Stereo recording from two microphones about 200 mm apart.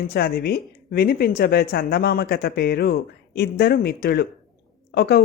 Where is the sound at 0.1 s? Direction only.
50° left (ahead or behind).